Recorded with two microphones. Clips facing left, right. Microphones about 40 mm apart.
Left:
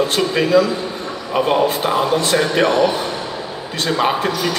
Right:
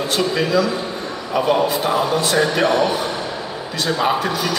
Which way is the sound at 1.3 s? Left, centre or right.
Left.